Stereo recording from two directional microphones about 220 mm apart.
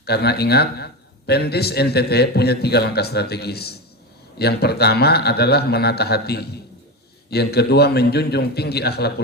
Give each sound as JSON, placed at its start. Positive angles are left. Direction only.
{"t": 0.0, "sound": "a man's voice", "side_deg": 45}